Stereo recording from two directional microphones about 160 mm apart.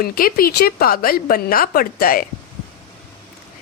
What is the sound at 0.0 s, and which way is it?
Speech, 65° left (ahead or behind).